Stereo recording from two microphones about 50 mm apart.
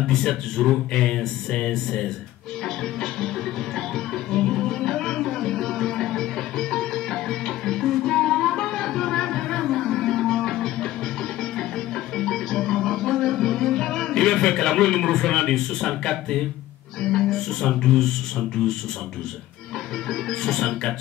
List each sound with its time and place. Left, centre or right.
0.0 s speech: centre
3.7 s music: centre
12.2 s music: centre
17.0 s speech: centre
20.1 s speech: centre